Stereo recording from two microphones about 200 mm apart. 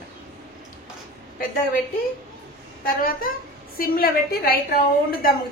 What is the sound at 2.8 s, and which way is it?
A woman's voice, 45° left (ahead or behind).